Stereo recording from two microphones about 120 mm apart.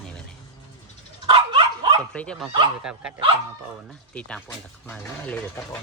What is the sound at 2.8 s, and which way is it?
Speech, 5° right (ahead or behind).